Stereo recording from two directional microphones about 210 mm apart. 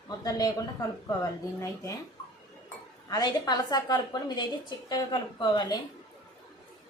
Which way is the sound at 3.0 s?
20° left (ahead or behind).